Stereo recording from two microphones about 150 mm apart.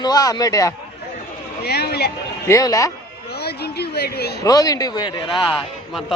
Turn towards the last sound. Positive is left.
turn(degrees=0)  # may be behind; listen again after turning